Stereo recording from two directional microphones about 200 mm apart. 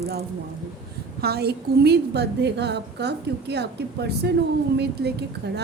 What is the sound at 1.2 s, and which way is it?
A woman's voice, 50° right (ahead or behind).